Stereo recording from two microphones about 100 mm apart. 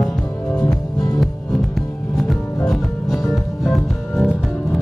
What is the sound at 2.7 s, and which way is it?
Music, centre (ahead or behind).